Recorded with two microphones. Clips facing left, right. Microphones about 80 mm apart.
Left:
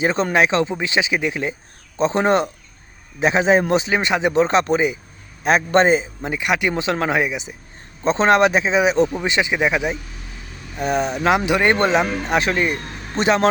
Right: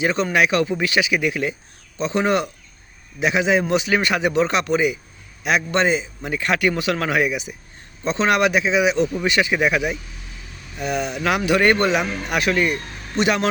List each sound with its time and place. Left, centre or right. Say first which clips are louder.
0.0 s a man's voice: left 1 dB; left
3.8 s a man's voice: left 1 dB; left
6.3 s speech: even; centre
10.8 s speech: left 3 dB; left